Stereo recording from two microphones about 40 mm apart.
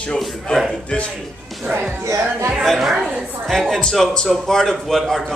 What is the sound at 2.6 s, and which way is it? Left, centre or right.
A man's voice, centre.